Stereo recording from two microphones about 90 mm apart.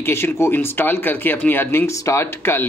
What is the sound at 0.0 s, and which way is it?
Speech, 30° left (ahead or behind).